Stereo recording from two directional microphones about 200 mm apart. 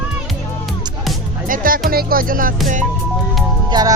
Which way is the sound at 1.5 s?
45° right (ahead or behind).